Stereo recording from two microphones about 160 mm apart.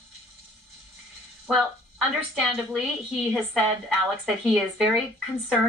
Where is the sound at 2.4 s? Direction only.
Centre (ahead or behind).